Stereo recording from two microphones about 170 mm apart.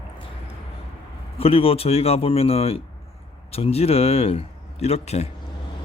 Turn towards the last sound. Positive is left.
turn(degrees=40)  # may be behind; listen again after turning